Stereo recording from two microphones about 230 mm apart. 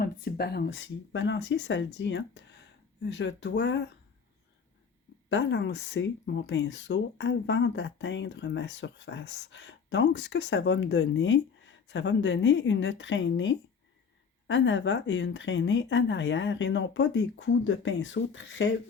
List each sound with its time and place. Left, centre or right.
0.0 s speech: left
5.3 s speech: left